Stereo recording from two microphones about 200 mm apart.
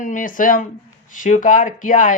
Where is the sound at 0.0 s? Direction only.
40° left (ahead or behind).